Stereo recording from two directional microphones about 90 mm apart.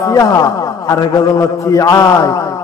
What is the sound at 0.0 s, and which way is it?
A man's voice, 40° left (ahead or behind).